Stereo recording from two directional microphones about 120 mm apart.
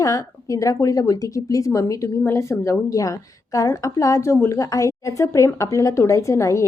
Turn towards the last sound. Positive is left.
turn(degrees=25)  # may be behind; listen again after turning